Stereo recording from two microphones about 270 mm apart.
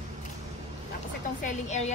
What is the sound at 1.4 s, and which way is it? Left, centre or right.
Speech, left.